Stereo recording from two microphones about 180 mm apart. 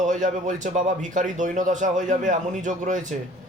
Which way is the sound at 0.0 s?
45° right (ahead or behind).